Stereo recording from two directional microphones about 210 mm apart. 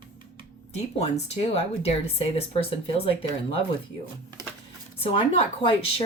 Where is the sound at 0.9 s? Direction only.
30° left (ahead or behind).